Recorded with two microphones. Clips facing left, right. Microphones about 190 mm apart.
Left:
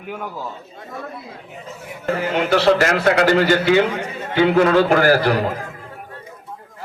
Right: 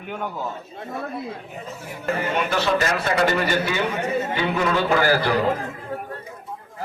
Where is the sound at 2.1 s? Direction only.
90° left.